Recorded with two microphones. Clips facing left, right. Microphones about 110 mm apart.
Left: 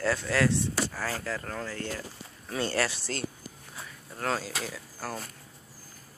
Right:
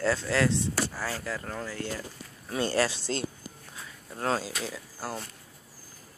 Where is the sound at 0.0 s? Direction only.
20° right (ahead or behind).